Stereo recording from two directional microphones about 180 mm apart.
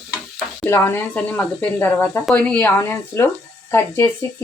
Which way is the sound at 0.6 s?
10° left (ahead or behind).